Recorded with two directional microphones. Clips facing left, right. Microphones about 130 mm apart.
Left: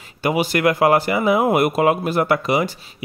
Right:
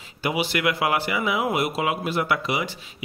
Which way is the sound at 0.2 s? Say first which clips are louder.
Left 6 dB; 45° left (ahead or behind).